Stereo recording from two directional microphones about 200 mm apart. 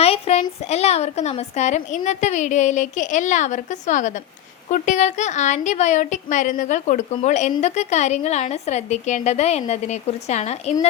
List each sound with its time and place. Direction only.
0.0 s a woman's voice: 30° left (ahead or behind)